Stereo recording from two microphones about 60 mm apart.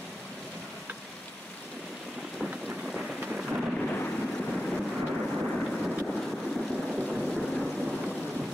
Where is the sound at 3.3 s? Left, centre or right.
Centre.